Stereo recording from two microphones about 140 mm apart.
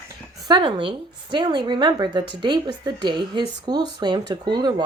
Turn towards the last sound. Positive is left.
turn(degrees=-30)  # may be behind; listen again after turning